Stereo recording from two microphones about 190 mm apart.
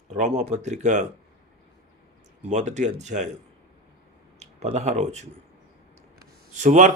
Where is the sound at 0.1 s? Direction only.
35° right (ahead or behind).